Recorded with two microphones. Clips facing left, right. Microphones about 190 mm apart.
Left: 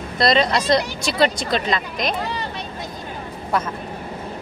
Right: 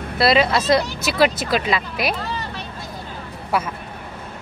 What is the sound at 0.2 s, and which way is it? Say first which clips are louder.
Speech: right 1 dB; 5° right (ahead or behind).